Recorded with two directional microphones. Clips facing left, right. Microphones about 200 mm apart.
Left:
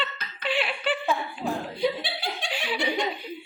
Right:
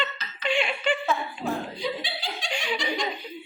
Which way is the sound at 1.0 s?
15° left (ahead or behind).